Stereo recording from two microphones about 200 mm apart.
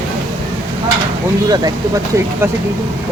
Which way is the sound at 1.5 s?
20° right (ahead or behind).